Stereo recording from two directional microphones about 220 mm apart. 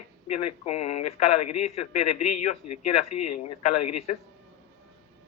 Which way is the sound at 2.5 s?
30° left (ahead or behind).